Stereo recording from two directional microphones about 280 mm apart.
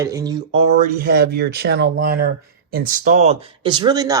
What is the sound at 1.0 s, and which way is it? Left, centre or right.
Speech, right.